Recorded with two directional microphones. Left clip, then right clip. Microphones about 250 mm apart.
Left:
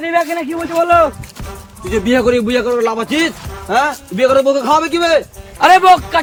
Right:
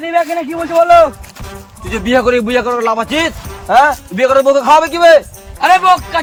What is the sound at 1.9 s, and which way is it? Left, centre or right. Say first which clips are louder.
A man's voice: right 1 dB; centre.